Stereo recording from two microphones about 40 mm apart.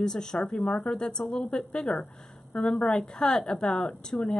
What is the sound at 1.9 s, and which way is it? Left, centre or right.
Speech, left.